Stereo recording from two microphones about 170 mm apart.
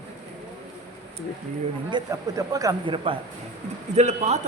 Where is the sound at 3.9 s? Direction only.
40° right (ahead or behind).